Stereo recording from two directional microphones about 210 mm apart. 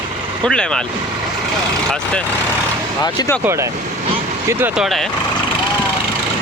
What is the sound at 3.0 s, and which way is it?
Speech, 20° left (ahead or behind).